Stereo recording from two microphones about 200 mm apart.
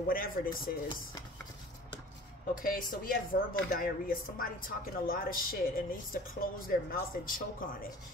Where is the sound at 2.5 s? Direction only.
45° left (ahead or behind).